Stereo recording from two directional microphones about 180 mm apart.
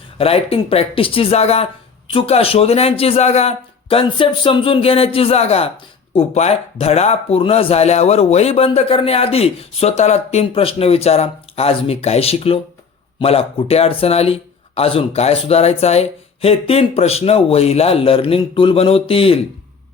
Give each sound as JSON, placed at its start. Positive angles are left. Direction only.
{"t": 0.2, "sound": "speech", "side_deg": 30}